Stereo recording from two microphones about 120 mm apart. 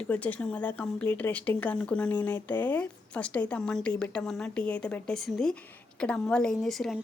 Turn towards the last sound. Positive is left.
turn(degrees=0)  # may be behind; listen again after turning